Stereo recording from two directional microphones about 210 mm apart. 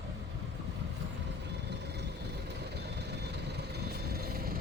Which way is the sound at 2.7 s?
50° right (ahead or behind).